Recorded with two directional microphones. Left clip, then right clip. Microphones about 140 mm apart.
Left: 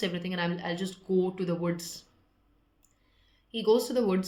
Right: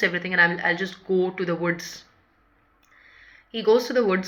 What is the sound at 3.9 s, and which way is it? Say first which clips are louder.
Speech: right 6 dB; 35° left (ahead or behind).